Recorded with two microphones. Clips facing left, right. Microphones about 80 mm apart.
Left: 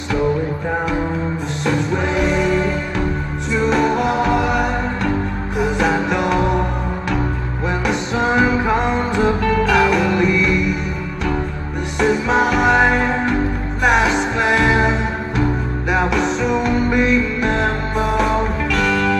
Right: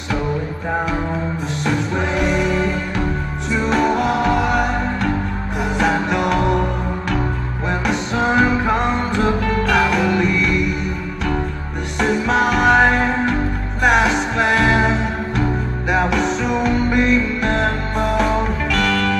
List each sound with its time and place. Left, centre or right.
1.6 s music: centre
7.8 s music: centre
12.0 s music: centre